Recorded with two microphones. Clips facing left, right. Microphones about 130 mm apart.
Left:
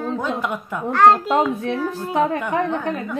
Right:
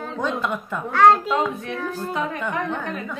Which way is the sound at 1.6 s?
25° left (ahead or behind).